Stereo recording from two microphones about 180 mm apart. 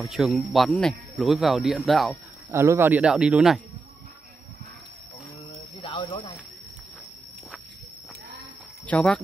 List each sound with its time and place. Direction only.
0.0 s speech: centre (ahead or behind)
2.5 s speech: 15° right (ahead or behind)
5.6 s a sound: 25° left (ahead or behind)
8.8 s speech: 5° left (ahead or behind)